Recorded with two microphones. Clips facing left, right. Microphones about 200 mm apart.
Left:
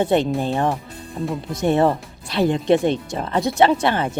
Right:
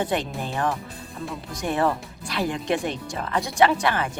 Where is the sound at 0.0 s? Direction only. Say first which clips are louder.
Left 8 dB; 25° left (ahead or behind).